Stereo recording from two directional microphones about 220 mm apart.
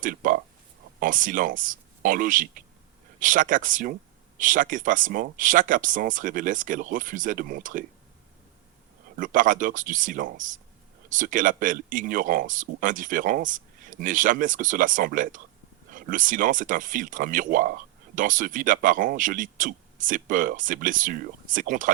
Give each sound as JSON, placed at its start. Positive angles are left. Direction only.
{"t": 0.0, "sound": "a sound", "side_deg": -40}
{"t": 0.9, "sound": "speech", "side_deg": -35}
{"t": 9.1, "sound": "speech", "side_deg": -35}